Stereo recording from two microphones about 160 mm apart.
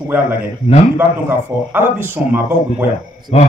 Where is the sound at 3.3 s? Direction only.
40° left (ahead or behind).